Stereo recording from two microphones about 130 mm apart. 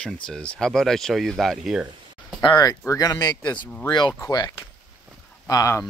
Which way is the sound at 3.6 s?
15° left (ahead or behind).